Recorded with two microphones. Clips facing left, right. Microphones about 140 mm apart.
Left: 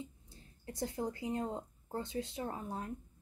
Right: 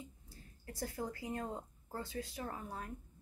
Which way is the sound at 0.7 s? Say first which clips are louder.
Left 4 dB; 25° left (ahead or behind).